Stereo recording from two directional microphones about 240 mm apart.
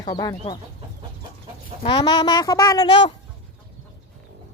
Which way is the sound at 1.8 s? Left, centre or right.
Centre.